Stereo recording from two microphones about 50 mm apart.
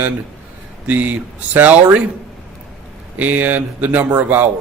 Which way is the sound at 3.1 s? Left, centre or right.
Right.